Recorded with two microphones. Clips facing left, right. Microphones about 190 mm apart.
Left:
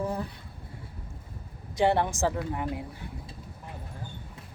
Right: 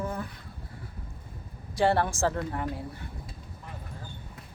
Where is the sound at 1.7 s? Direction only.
20° left (ahead or behind).